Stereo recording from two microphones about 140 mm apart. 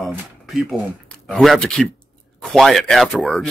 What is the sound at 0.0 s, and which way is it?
A man's voice, centre (ahead or behind).